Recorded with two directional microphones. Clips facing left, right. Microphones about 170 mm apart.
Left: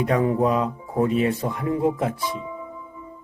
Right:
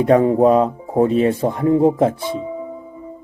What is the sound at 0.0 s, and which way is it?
Speech, 30° right (ahead or behind).